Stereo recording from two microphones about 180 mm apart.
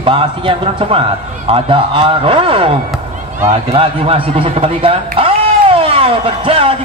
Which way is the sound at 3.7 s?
30° right (ahead or behind).